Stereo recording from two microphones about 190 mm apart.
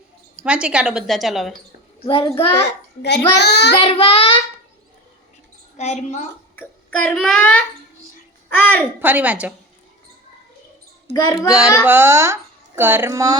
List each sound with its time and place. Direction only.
0.3 s a woman's voice: 5° right (ahead or behind)
2.0 s a child's voice: 25° left (ahead or behind)
3.0 s a child's voice: 60° left (ahead or behind)
3.8 s a child's voice: 30° left (ahead or behind)
5.7 s a woman's voice: 35° left (ahead or behind)
6.6 s a child's voice: 5° left (ahead or behind)
8.4 s a sound: 10° left (ahead or behind)
9.0 s speech: 10° right (ahead or behind)
11.1 s a child's voice: 20° left (ahead or behind)
11.9 s speech: 10° right (ahead or behind)